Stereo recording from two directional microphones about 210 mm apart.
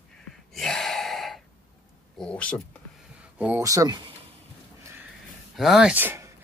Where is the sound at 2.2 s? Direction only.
5° left (ahead or behind).